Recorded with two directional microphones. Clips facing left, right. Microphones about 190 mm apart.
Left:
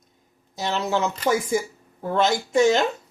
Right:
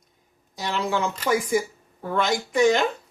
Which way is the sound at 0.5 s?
25° left (ahead or behind).